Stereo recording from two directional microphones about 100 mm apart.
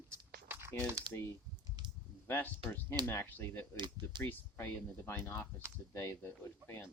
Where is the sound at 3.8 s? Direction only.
50° right (ahead or behind).